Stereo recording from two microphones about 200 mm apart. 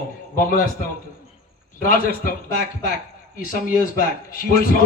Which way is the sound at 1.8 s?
45° left (ahead or behind).